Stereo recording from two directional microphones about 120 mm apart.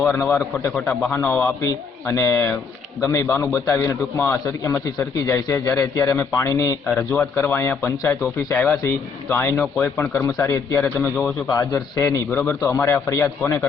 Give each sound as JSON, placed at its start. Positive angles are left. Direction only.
{"t": 0.0, "sound": "a man's voice", "side_deg": 25}